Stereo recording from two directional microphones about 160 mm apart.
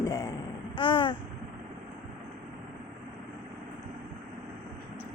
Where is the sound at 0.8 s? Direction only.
30° left (ahead or behind).